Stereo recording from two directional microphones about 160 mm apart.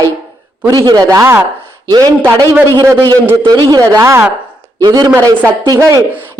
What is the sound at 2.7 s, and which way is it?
Speech, 25° right (ahead or behind).